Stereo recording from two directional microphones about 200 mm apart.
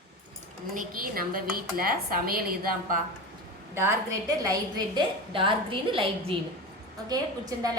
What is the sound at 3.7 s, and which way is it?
A woman's voice, 15° right (ahead or behind).